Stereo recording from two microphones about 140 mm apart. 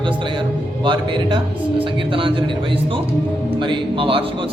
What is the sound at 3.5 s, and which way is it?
Speech, 40° right (ahead or behind).